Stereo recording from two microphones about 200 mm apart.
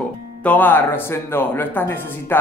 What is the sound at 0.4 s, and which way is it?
A man's voice, 10° left (ahead or behind).